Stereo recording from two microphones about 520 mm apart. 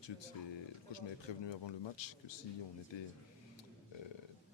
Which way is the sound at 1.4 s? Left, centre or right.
Left.